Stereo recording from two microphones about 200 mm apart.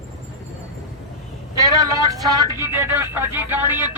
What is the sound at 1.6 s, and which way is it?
Vehicle, 15° right (ahead or behind).